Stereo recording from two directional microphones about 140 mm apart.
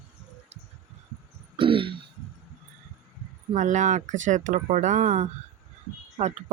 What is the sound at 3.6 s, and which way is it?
Speech, 60° right (ahead or behind).